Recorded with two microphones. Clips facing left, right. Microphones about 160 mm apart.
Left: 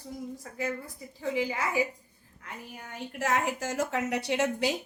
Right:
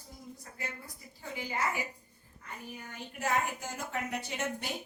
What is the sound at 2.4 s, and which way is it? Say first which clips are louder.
A woman's voice: left 1 dB; 70° left (ahead or behind).